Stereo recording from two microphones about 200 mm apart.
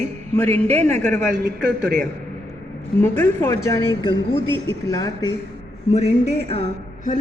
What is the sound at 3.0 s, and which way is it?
A woman's voice, 10° left (ahead or behind).